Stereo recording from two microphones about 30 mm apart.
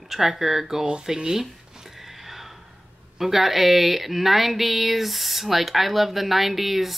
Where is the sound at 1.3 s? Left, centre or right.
Centre.